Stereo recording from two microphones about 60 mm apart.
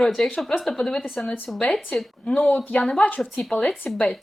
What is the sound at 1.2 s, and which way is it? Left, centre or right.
Speech, centre.